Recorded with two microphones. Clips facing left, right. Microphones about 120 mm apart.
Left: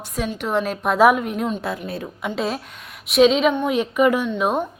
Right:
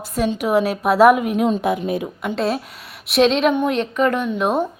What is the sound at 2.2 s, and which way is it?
A woman's voice, centre (ahead or behind).